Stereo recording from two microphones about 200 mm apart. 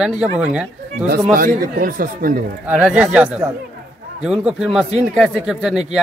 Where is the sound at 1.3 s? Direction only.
45° right (ahead or behind).